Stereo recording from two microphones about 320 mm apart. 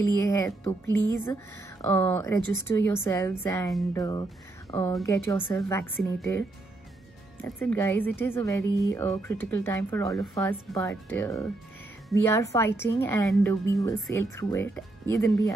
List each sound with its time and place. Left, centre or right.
0.2 s a woman's voice: centre
7.4 s a woman's voice: centre